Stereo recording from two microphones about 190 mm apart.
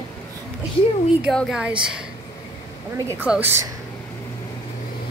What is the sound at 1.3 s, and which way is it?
Speech, 5° right (ahead or behind).